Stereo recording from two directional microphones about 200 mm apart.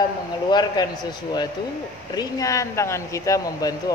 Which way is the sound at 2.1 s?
15° left (ahead or behind).